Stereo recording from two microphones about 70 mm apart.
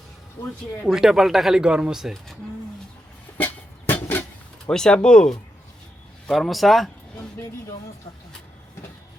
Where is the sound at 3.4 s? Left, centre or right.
Left.